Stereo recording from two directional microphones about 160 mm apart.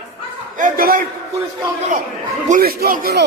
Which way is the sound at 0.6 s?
60° right (ahead or behind).